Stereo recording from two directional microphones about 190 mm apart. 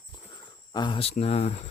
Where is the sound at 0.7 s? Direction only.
25° left (ahead or behind).